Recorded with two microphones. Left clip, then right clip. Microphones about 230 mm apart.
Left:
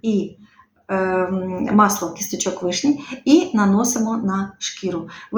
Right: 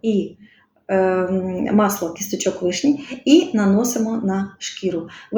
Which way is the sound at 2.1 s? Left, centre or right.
Left.